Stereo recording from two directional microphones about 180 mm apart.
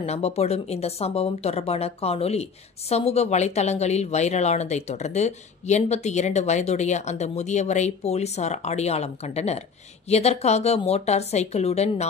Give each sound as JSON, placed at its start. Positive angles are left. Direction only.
{"t": 0.0, "sound": "speech", "side_deg": 35}